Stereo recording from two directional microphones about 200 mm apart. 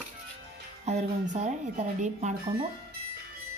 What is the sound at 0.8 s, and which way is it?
Speech, 35° right (ahead or behind).